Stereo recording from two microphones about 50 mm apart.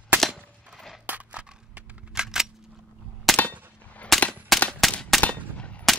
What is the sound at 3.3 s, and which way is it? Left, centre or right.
Gunshot, centre.